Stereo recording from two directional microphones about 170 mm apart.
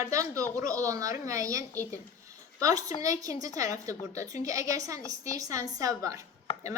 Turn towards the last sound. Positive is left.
turn(degrees=35)  # may be behind; listen again after turning